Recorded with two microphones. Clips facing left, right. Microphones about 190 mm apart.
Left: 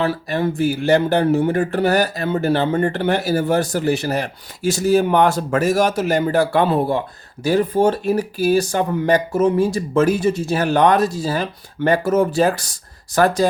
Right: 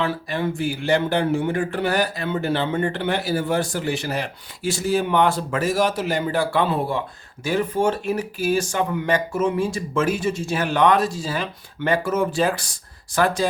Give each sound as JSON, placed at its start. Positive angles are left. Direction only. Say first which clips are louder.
{"t": 0.0, "sound": "speech", "louder": "left 4 dB", "side_deg": 40}